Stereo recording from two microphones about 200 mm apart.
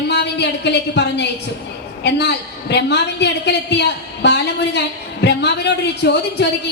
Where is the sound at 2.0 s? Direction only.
60° left (ahead or behind).